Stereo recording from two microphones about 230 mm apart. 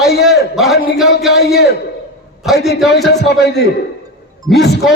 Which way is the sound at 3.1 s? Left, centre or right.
Left.